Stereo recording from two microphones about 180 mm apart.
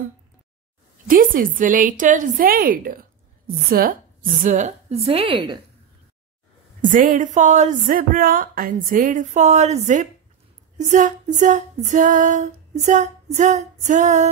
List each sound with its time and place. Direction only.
1.0 s a woman's voice: 50° right (ahead or behind); by 5.6 s 25° right (ahead or behind)
6.8 s a woman's voice: 50° right (ahead or behind)